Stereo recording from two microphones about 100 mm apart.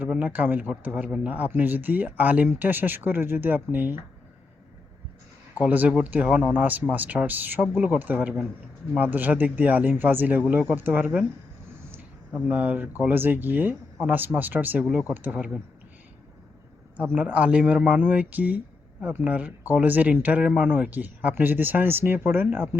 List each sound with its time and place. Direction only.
0.0 s speech: 15° right (ahead or behind)
5.5 s speech: 15° right (ahead or behind)
12.5 s speech: 15° right (ahead or behind)
17.0 s speech: 15° right (ahead or behind)